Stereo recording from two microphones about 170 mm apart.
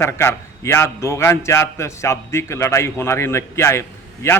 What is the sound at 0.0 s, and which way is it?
A man's voice, 15° left (ahead or behind).